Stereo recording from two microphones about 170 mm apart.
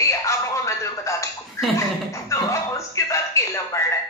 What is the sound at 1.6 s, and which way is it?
Speech, 20° left (ahead or behind).